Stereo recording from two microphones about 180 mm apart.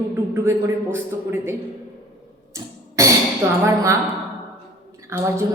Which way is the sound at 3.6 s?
15° right (ahead or behind).